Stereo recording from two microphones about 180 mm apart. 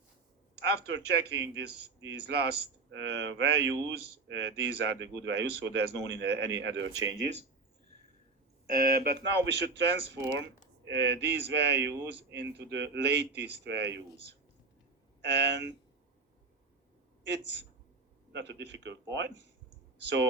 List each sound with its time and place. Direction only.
0.6 s speech: 70° right (ahead or behind); by 7.4 s 85° right
8.7 s speech: 55° right (ahead or behind); by 14.0 s 75° right (ahead or behind)
15.2 s speech: 70° right (ahead or behind)
17.2 s speech: 75° right (ahead or behind)